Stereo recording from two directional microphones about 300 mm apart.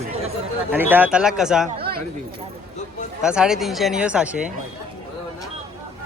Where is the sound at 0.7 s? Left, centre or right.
Centre.